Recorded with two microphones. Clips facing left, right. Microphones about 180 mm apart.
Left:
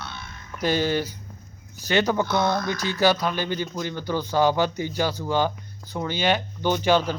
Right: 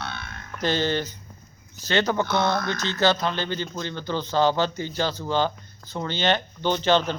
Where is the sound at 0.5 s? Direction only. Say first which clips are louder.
Left 1 dB; 10° left (ahead or behind).